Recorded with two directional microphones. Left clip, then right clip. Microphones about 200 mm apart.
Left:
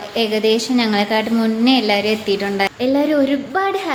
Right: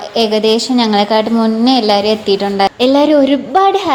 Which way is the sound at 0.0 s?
25° right (ahead or behind).